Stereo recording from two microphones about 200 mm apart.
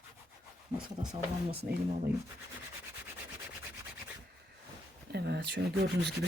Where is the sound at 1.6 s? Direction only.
45° right (ahead or behind).